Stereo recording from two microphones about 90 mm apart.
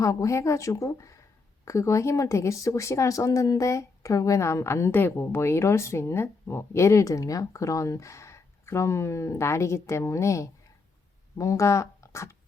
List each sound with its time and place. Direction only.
0.0 s speech: 40° left (ahead or behind)